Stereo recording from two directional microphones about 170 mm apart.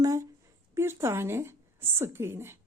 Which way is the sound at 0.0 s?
20° right (ahead or behind).